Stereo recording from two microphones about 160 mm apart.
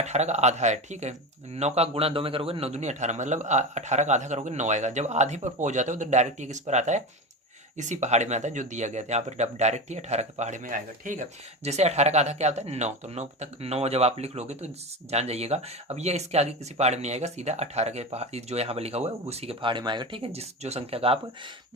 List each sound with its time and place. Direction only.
0.0 s speech: 45° right (ahead or behind)